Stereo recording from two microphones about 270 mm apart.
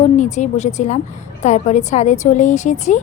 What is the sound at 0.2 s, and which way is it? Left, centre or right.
A woman's voice, left.